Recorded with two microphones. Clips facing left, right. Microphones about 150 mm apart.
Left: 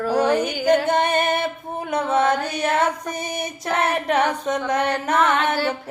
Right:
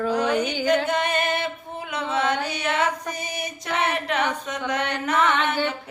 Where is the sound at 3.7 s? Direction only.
50° left (ahead or behind).